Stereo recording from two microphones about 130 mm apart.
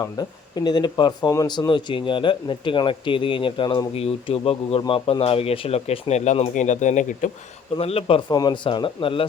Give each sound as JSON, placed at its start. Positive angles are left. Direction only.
{"t": 0.0, "sound": "speech", "side_deg": 30}
{"t": 6.5, "sound": "speech", "side_deg": 70}
{"t": 7.8, "sound": "speech", "side_deg": 50}